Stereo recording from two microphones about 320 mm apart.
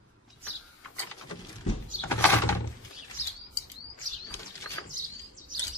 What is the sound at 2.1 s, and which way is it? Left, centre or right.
Mechanisms, centre.